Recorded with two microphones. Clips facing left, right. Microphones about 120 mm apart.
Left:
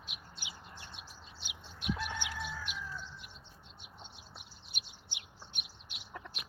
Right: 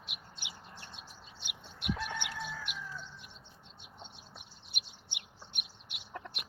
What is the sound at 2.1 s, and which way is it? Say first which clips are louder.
Chicken: even; 60° right (ahead or behind).